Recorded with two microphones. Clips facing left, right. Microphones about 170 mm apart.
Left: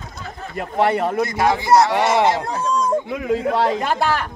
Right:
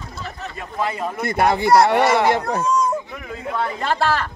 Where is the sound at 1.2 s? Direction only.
60° right (ahead or behind).